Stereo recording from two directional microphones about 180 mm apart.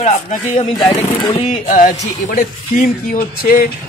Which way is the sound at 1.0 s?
30° left (ahead or behind).